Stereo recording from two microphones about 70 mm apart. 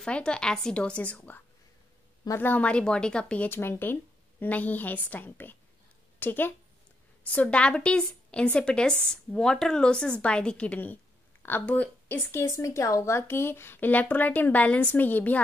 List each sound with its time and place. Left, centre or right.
0.0 s a woman's voice: centre; by 2.6 s left
2.6 s a woman's voice: centre
3.4 s a woman's voice: left
7.2 s a woman's voice: centre
11.4 s a woman's voice: left
12.3 s speech: left